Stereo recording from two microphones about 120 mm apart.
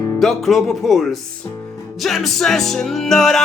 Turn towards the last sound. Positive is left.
turn(degrees=0)  # may be behind; listen again after turning